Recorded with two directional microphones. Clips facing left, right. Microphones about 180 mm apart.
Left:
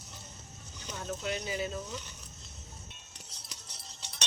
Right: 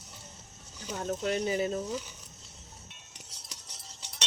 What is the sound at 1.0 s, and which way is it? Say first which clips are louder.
Speech: right 6 dB; 45° right (ahead or behind).